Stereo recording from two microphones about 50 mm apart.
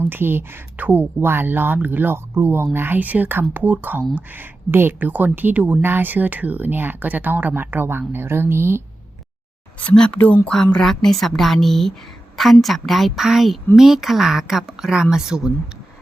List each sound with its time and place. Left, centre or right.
0.0 s speech: right
0.8 s speech: right
1.2 s speech: right
2.1 s speech: right
3.0 s speech: right
9.9 s a woman's voice: centre